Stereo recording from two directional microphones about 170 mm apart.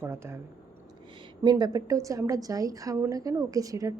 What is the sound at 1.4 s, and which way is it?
A woman's voice, 25° right (ahead or behind).